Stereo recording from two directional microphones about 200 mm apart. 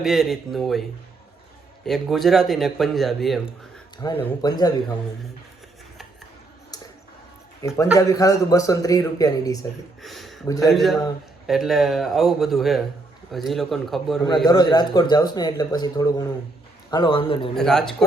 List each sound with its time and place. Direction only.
0.0 s a man's voice: centre (ahead or behind)
3.9 s speech: 20° left (ahead or behind)
7.6 s a man's voice: 15° left (ahead or behind)
10.0 s a sound: centre (ahead or behind)
10.4 s a man's voice: 15° left (ahead or behind)
10.7 s a man's voice: centre (ahead or behind)
14.4 s speech: 20° left (ahead or behind)
17.5 s a man's voice: 5° left (ahead or behind)